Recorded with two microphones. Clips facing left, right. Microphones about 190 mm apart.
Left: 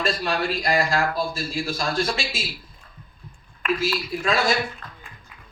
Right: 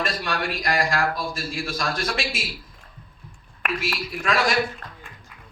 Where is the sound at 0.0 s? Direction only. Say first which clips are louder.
Left 2 dB; 30° left (ahead or behind).